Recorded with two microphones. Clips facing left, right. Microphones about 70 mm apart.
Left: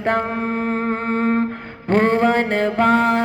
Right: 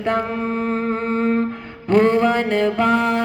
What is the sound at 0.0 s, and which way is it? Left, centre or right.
Music, left.